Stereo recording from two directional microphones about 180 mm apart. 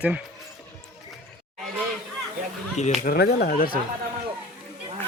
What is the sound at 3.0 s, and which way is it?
Speech, 60° left (ahead or behind).